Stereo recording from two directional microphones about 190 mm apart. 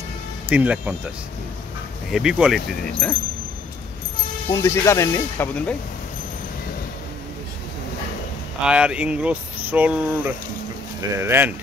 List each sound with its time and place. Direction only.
0.5 s speech: 5° right (ahead or behind)
2.0 s speech: 5° right (ahead or behind)
4.5 s speech: 15° left (ahead or behind)
8.6 s speech: 5° right (ahead or behind)